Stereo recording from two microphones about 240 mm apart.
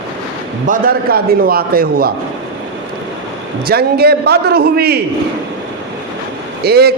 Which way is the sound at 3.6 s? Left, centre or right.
Right.